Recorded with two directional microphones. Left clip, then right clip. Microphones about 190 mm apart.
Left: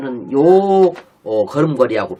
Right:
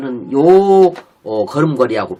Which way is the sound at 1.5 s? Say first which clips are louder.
Right 3 dB; 15° right (ahead or behind).